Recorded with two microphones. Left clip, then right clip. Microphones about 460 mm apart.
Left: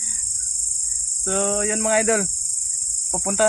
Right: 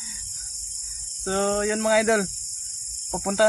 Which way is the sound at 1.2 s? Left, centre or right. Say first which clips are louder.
Even; right.